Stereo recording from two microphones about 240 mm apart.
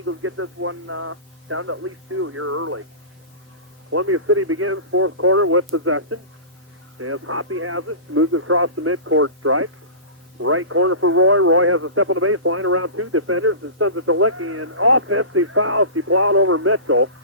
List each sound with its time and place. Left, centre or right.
0.0 s a man's voice: right
3.9 s a man's voice: right